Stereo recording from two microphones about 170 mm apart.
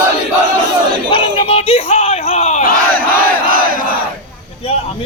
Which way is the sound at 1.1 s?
30° left (ahead or behind).